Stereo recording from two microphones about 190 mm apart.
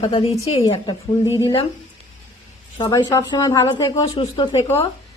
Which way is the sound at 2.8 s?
20° left (ahead or behind).